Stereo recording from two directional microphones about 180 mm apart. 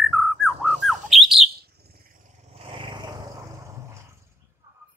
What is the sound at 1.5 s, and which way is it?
Bird, 60° right (ahead or behind).